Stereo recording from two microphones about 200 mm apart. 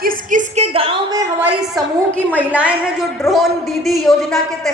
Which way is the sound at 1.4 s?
10° right (ahead or behind).